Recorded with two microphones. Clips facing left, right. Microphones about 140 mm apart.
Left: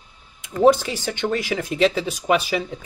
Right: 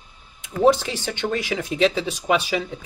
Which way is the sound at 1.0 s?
45° left (ahead or behind).